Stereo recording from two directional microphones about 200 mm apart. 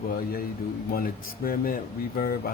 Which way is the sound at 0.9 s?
45° left (ahead or behind).